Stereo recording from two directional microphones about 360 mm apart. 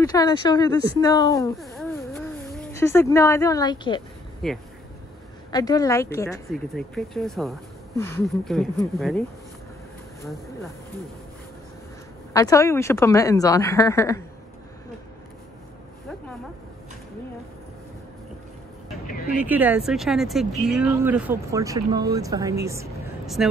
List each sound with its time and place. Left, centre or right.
0.0 s speech: centre
4.4 s speech: centre
12.3 s speech: centre
19.0 s vehicle: left
19.4 s speech: centre